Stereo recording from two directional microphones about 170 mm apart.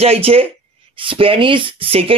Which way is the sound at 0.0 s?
35° right (ahead or behind).